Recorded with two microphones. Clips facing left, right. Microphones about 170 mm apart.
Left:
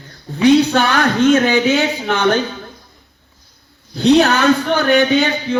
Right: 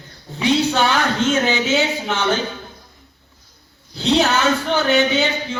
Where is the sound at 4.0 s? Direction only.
60° left (ahead or behind).